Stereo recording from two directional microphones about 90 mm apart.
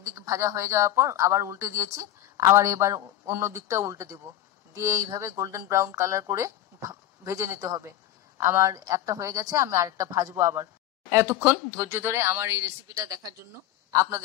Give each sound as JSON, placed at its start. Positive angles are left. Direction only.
{"t": 0.0, "sound": "a woman's voice", "side_deg": -35}